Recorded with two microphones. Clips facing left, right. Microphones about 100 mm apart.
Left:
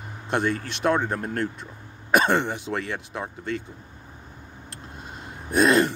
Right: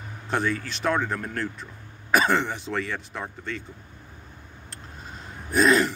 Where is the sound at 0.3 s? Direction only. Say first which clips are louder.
Left 1 dB; 20° left (ahead or behind).